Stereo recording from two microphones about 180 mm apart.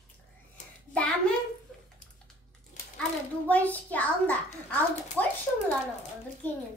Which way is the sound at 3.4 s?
10° left (ahead or behind).